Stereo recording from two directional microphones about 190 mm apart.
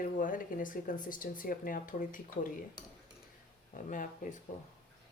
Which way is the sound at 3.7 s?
45° left (ahead or behind).